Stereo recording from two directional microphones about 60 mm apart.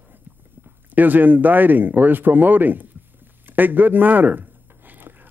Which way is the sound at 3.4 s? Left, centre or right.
Right.